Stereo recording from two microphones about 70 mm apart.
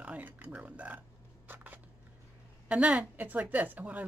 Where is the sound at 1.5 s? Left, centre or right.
Right.